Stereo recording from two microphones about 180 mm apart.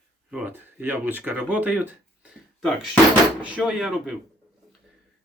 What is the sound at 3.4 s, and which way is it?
Speech, 5° right (ahead or behind).